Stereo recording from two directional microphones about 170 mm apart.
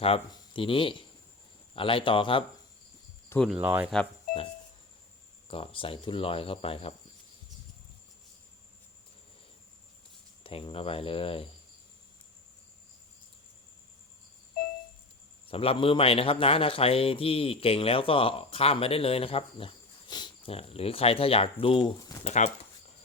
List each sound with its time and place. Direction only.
0.0 s a man's voice: 30° left (ahead or behind)
3.2 s speech: 10° left (ahead or behind)
3.6 s speech: 15° right (ahead or behind)
5.5 s a man's voice: 30° left (ahead or behind)
10.4 s a man's voice: 30° left (ahead or behind)
15.4 s a man's voice: 35° left (ahead or behind)